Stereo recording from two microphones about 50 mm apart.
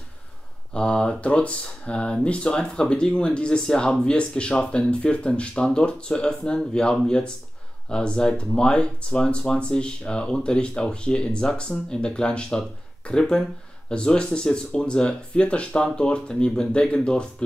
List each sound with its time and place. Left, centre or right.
0.7 s speech: centre